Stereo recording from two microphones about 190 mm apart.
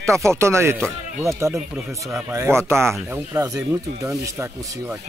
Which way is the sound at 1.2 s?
15° right (ahead or behind).